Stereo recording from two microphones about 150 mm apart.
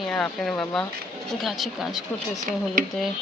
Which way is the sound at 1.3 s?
Centre (ahead or behind).